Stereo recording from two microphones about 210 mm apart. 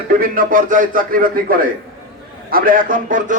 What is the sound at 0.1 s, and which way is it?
Speech, 40° right (ahead or behind).